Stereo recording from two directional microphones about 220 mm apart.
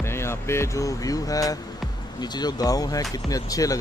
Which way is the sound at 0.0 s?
10° left (ahead or behind).